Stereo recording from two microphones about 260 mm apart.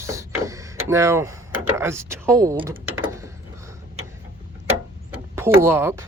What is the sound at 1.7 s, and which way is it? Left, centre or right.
Speech, centre.